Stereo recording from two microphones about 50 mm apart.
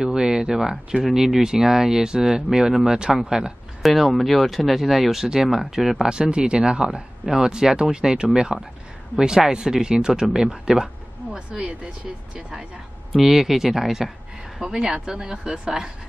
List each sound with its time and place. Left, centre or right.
0.0 s speech: centre
3.8 s speech: centre
6.0 s speech: centre
13.1 s speech: centre